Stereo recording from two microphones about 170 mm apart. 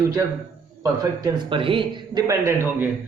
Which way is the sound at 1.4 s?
30° right (ahead or behind).